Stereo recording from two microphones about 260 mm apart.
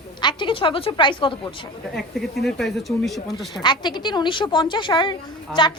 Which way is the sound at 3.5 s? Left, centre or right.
Centre.